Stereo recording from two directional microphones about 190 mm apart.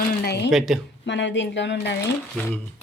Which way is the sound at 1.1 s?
70° left (ahead or behind).